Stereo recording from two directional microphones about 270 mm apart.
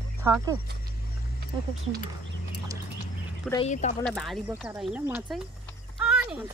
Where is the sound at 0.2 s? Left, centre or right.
Centre.